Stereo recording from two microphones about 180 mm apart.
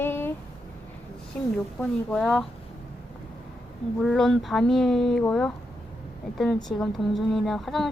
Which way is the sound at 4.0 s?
Centre (ahead or behind).